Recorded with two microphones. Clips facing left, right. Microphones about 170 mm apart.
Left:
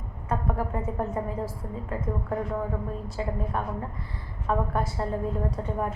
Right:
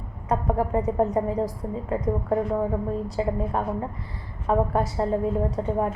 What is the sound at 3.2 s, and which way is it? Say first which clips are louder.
A woman's voice: right 4 dB; 25° right (ahead or behind).